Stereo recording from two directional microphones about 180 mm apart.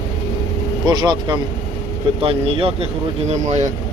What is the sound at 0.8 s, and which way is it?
Speech, 20° right (ahead or behind).